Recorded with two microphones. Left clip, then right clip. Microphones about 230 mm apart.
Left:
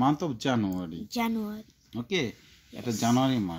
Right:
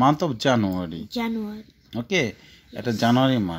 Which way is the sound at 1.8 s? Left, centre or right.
Centre.